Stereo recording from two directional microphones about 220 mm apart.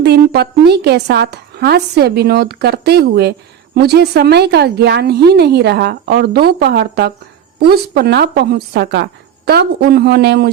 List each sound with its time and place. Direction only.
0.0 s a woman's voice: 50° right (ahead or behind)